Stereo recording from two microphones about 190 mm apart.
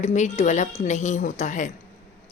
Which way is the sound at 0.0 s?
35° left (ahead or behind).